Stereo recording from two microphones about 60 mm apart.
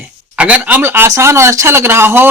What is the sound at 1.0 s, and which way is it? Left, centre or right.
Speech, right.